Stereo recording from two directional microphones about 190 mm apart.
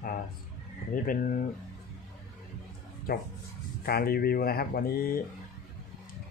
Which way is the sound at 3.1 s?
55° left (ahead or behind).